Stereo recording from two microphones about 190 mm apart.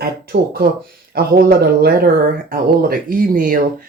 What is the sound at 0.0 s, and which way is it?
Speech, 50° right (ahead or behind).